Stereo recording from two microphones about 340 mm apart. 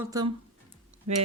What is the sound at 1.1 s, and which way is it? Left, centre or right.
Speech, right.